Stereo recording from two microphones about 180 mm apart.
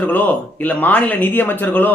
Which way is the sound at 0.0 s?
10° left (ahead or behind).